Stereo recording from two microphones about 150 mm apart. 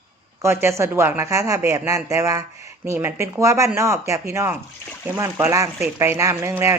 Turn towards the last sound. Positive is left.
turn(degrees=-20)  # may be behind; listen again after turning